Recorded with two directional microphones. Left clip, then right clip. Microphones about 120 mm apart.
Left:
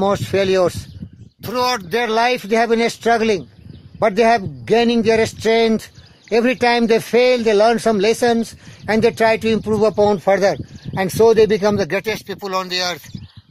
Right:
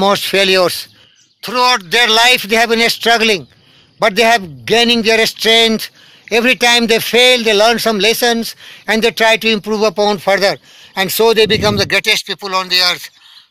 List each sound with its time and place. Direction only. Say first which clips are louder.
0.0 s speech: right 5 dB; 20° right (ahead or behind)
1.4 s speech: right 7 dB; 5° right (ahead or behind)